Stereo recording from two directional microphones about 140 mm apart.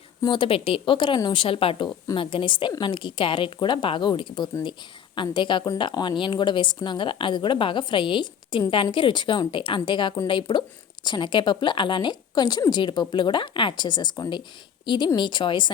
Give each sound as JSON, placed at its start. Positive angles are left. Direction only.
{"t": 0.2, "sound": "a woman's voice", "side_deg": 35}